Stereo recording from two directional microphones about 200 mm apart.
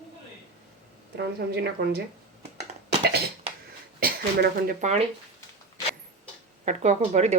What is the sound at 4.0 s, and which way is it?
Speech, 45° right (ahead or behind).